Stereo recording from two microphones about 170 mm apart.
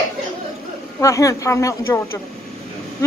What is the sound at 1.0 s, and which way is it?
Speech, 20° left (ahead or behind).